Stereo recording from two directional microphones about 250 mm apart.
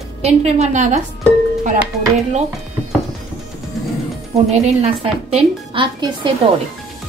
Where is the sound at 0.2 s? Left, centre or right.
Right.